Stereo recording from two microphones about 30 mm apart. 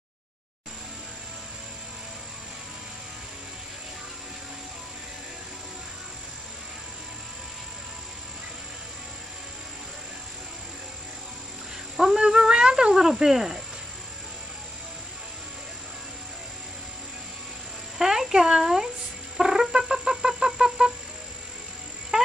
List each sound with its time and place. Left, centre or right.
12.3 s humming: right
12.9 s speech: centre
17.9 s a sound: centre
19.3 s music: centre
19.8 s bird: centre
22.1 s insect: right